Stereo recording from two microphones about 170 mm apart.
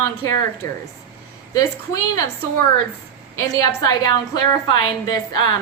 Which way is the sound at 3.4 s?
20° left (ahead or behind).